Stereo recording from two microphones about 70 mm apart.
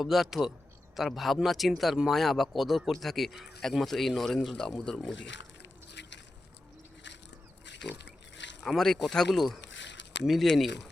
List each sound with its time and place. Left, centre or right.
0.0 s speech: centre
8.6 s speech: centre